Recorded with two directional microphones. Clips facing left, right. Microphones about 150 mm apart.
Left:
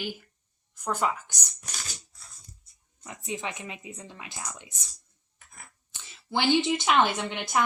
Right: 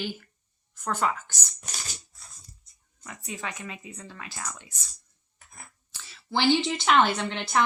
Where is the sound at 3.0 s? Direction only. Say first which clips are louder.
Left 2 dB; 20° left (ahead or behind).